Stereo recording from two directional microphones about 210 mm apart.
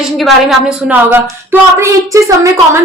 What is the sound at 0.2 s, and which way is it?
A woman's voice, centre (ahead or behind).